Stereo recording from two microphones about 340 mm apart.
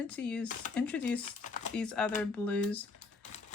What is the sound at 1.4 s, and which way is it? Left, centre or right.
Crumpling, left.